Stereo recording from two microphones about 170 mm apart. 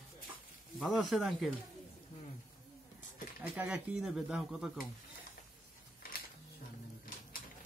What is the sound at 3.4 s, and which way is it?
Speech, 10° right (ahead or behind).